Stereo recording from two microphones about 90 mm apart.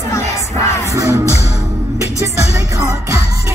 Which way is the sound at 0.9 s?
35° right (ahead or behind).